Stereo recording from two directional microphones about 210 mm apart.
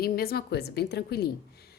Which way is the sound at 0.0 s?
45° left (ahead or behind).